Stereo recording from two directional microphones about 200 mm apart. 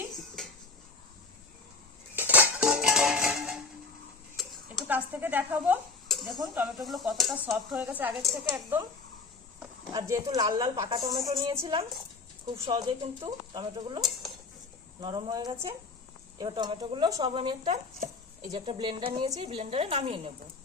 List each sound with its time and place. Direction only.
0.4 s dishes: centre (ahead or behind)
2.1 s music: 10° right (ahead or behind)
4.4 s dishes: centre (ahead or behind)
6.1 s speech: centre (ahead or behind)
9.9 s a woman's voice: 20° right (ahead or behind)
14.0 s dishes: centre (ahead or behind)
15.0 s a woman's voice: 20° right (ahead or behind)